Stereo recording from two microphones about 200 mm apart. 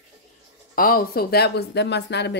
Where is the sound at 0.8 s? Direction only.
45° left (ahead or behind).